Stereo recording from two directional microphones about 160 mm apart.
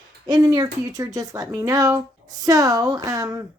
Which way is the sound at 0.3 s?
25° right (ahead or behind).